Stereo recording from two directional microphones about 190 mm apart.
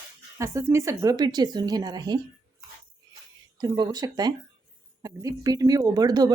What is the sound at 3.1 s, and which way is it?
Music, 20° right (ahead or behind).